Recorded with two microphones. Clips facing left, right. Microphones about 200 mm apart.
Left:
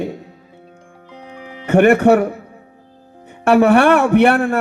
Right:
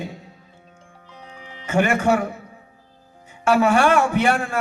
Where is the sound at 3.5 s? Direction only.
60° left (ahead or behind).